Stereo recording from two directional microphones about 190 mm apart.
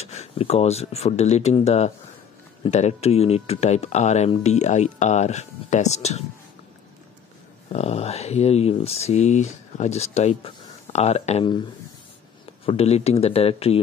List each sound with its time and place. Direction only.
0.0 s speech: 35° left (ahead or behind)
7.7 s speech: 35° left (ahead or behind)
12.6 s speech: 35° left (ahead or behind)